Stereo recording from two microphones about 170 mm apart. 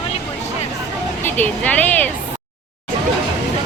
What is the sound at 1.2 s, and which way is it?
Speech, 10° left (ahead or behind).